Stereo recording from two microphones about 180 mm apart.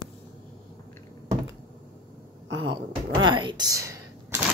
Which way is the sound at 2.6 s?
25° right (ahead or behind).